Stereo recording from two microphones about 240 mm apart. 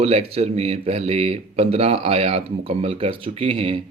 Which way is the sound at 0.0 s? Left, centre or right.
Right.